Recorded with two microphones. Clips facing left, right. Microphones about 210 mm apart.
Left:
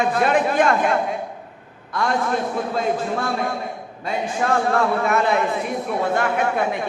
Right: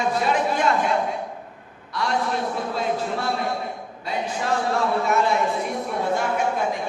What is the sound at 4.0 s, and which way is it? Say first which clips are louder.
A man's voice: left 4 dB; 55° left (ahead or behind).